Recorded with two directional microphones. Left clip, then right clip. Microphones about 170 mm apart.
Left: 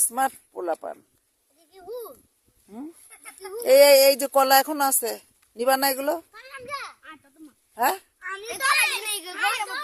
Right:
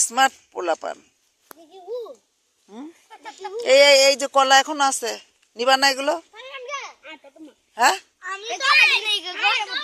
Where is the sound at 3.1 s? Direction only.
55° left (ahead or behind).